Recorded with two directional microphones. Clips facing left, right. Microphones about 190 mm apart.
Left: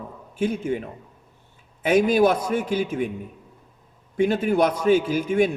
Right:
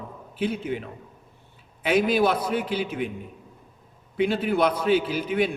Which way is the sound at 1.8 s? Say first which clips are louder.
Left 3 dB; 45° left (ahead or behind).